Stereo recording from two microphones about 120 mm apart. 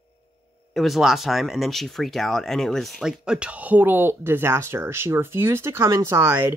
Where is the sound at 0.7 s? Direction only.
Centre (ahead or behind).